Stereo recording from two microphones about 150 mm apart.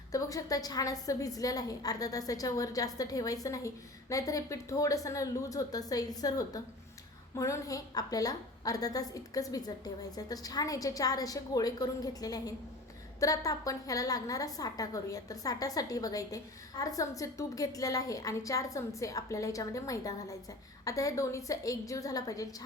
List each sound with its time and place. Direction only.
0.1 s a woman's voice: 25° left (ahead or behind)